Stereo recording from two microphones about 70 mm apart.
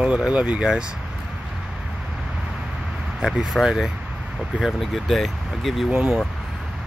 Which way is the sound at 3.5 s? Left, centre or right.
Centre.